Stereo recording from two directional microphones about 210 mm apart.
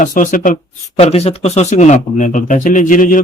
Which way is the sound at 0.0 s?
40° left (ahead or behind).